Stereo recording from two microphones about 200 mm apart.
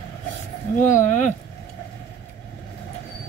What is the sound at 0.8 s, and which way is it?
Speech, 40° left (ahead or behind).